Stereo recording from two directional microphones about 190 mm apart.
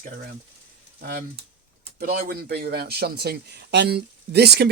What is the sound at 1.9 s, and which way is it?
Speech, 55° right (ahead or behind).